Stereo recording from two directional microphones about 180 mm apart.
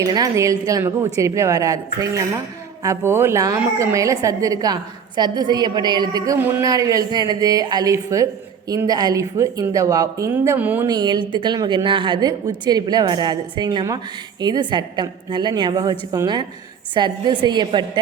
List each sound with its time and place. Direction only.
0.0 s a woman's voice: 20° right (ahead or behind)
10.8 s a woman's voice: 25° right (ahead or behind)